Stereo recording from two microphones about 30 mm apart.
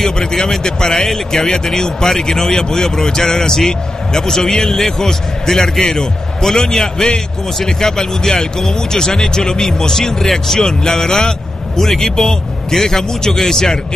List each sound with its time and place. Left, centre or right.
0.0 s a man's voice: centre